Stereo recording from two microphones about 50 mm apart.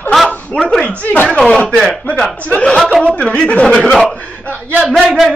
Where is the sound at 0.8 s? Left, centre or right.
Left.